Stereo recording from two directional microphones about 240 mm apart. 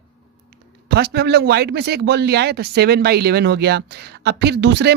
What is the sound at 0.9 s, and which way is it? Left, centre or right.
A man's voice, right.